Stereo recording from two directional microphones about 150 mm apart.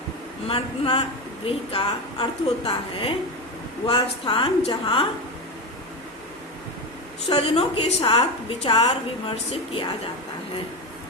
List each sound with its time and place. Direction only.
0.4 s a woman's voice: 40° left (ahead or behind)
7.3 s a woman's voice: 40° left (ahead or behind)